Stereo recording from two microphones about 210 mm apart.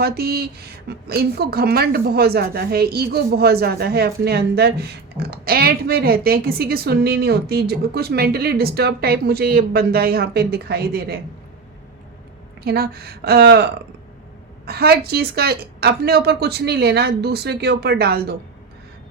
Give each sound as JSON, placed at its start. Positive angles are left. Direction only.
{"t": 0.0, "sound": "a woman's voice", "side_deg": -50}
{"t": 12.6, "sound": "a woman's voice", "side_deg": -45}
{"t": 14.7, "sound": "a woman's voice", "side_deg": -50}